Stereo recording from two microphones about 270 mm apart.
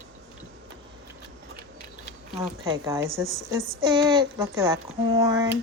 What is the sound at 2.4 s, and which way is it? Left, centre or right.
Speech, centre.